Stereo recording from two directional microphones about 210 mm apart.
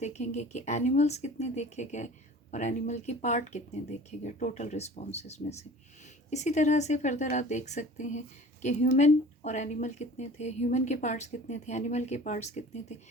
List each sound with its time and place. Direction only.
0.0 s speech: 35° left (ahead or behind)